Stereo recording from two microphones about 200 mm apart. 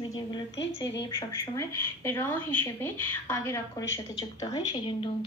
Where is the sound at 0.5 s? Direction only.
65° left (ahead or behind).